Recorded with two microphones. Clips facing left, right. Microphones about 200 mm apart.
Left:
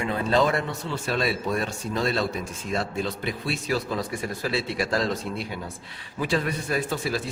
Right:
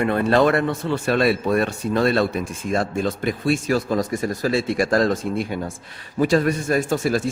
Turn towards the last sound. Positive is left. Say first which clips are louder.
# right 7 dB
turn(degrees=-45)  # may be behind; listen again after turning